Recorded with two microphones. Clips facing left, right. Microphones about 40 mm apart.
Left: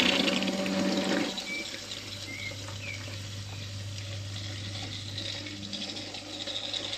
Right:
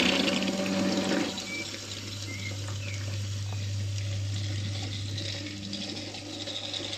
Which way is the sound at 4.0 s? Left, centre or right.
Centre.